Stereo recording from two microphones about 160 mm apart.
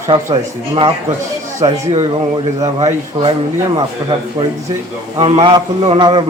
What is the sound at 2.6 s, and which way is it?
Speech, 45° right (ahead or behind).